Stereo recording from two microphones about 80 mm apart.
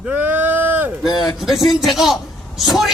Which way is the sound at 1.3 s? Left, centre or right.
Centre.